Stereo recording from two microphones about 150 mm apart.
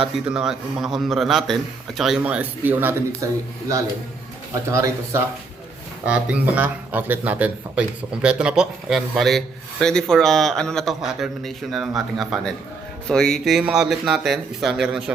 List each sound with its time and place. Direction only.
0.3 s a man's voice: 5° right (ahead or behind)
4.7 s speech: 20° right (ahead or behind)
6.1 s a man's voice: 5° right (ahead or behind)